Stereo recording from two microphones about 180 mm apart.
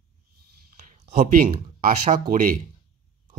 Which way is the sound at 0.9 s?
50° right (ahead or behind).